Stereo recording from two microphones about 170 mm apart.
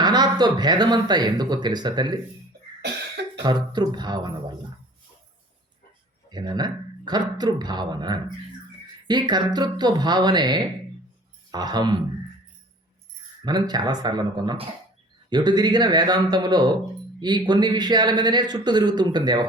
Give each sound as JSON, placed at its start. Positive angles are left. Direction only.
{"t": 0.0, "sound": "speech", "side_deg": -25}
{"t": 2.8, "sound": "cough", "side_deg": -85}
{"t": 3.4, "sound": "speech", "side_deg": -25}
{"t": 6.3, "sound": "speech", "side_deg": -25}
{"t": 13.4, "sound": "speech", "side_deg": -25}